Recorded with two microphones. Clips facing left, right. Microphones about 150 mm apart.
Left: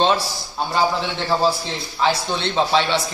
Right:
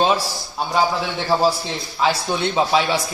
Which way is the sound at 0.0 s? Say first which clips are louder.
Even; 5° right (ahead or behind).